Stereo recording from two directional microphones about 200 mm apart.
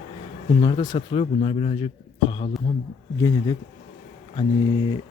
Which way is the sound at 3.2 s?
15° left (ahead or behind).